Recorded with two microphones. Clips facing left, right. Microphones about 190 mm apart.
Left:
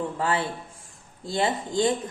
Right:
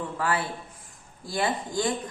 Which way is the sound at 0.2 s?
25° left (ahead or behind).